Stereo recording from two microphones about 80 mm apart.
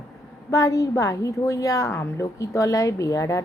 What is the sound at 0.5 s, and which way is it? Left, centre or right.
A woman's voice, left.